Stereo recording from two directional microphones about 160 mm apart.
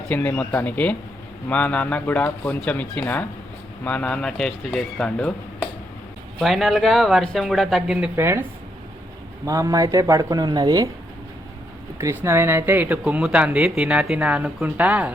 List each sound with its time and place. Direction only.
0.1 s speech: 10° left (ahead or behind)
6.4 s speech: centre (ahead or behind); by 8.4 s 15° right (ahead or behind)
9.5 s speech: 20° right (ahead or behind)
11.9 s speech: 15° right (ahead or behind)